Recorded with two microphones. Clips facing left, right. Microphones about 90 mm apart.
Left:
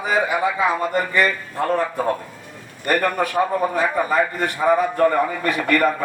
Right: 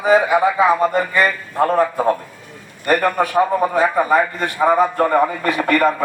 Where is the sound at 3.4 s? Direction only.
20° right (ahead or behind).